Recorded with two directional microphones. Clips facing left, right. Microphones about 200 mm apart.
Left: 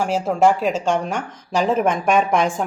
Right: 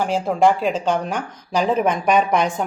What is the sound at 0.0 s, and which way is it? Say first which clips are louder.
Speech: even; 5° left (ahead or behind).